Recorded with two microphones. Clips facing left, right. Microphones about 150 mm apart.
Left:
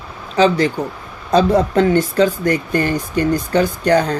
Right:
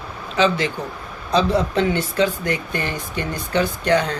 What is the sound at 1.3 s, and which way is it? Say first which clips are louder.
Speech: left 5 dB; 50° left (ahead or behind).